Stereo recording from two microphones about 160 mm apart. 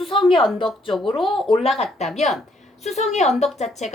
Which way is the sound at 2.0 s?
45° left (ahead or behind).